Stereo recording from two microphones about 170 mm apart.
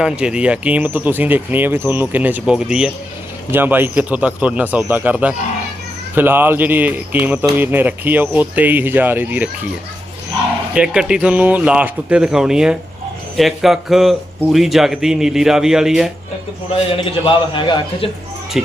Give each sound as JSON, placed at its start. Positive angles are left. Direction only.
{"t": 0.0, "sound": "speech", "side_deg": -5}
{"t": 10.8, "sound": "speech", "side_deg": -5}
{"t": 16.9, "sound": "a man's voice", "side_deg": 30}
{"t": 18.5, "sound": "speech", "side_deg": 0}